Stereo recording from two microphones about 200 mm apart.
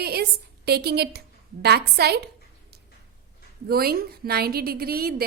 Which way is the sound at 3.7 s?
50° right (ahead or behind).